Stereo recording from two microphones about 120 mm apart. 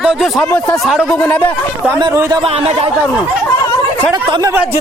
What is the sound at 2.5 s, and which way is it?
Speech, 55° right (ahead or behind).